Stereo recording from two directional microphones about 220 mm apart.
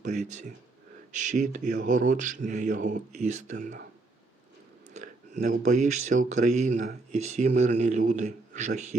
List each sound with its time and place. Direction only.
0.0 s speech: 30° right (ahead or behind)
4.9 s speech: 35° right (ahead or behind)